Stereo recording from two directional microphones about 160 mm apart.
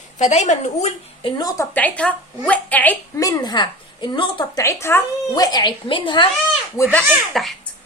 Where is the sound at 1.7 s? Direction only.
10° left (ahead or behind).